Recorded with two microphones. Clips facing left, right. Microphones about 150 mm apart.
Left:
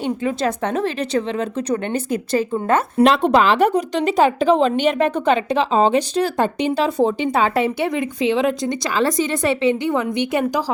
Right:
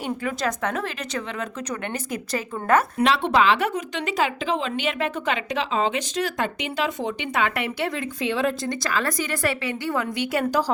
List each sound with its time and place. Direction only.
0.0 s speech: 30° left (ahead or behind)
3.0 s speech: 40° left (ahead or behind); by 10.6 s 20° left (ahead or behind)